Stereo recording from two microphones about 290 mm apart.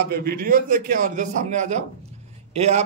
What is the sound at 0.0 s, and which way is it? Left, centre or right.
A man's voice, right.